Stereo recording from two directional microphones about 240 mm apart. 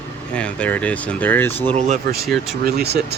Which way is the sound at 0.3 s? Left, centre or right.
Centre.